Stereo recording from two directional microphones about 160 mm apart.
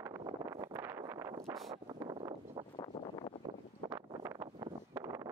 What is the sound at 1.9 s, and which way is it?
Vehicle, 25° right (ahead or behind).